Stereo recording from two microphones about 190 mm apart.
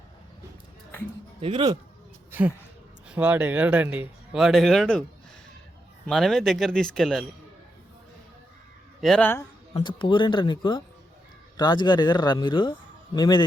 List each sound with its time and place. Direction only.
1.4 s speech: 25° right (ahead or behind)
3.1 s speech: 5° right (ahead or behind)
6.1 s speech: centre (ahead or behind)
9.0 s speech: 5° left (ahead or behind)
9.7 s speech: 25° left (ahead or behind)